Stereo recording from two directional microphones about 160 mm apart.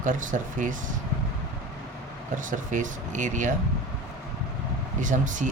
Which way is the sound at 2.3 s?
55° right (ahead or behind).